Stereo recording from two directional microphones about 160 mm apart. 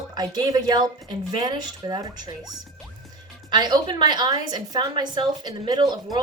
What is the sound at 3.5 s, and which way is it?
A woman's voice, 25° right (ahead or behind).